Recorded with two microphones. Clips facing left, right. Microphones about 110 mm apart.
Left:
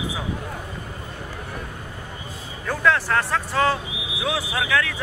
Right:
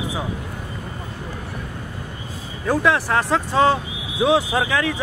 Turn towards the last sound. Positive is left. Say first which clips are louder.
# right 3 dB
turn(degrees=-20)  # may be behind; listen again after turning